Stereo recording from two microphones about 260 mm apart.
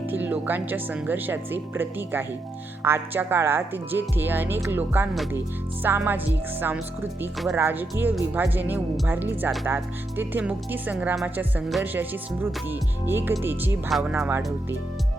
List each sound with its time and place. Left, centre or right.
0.1 s speech: centre